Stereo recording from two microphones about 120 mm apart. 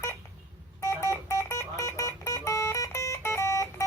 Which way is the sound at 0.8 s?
25° left (ahead or behind).